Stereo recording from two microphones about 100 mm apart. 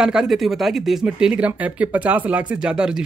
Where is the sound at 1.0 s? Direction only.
10° right (ahead or behind).